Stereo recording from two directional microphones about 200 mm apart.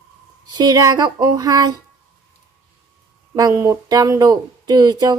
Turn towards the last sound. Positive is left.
turn(degrees=-20)  # may be behind; listen again after turning